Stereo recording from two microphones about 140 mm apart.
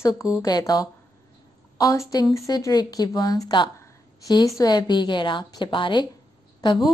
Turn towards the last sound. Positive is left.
turn(degrees=35)  # may be behind; listen again after turning